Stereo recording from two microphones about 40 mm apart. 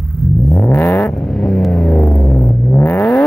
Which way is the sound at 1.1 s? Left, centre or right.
Centre.